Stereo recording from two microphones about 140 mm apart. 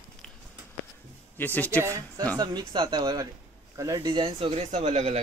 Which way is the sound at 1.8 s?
20° right (ahead or behind).